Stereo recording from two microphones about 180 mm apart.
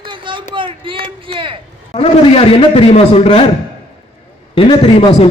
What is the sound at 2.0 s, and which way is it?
A man's voice, 30° left (ahead or behind).